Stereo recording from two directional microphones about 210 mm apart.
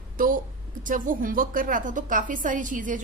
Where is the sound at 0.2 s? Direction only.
40° right (ahead or behind).